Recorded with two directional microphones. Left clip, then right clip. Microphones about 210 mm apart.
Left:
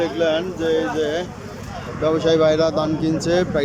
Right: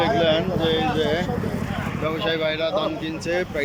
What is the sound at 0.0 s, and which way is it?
Speech, 10° left (ahead or behind).